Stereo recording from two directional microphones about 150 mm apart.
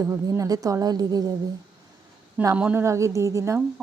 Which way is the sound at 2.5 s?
10° right (ahead or behind).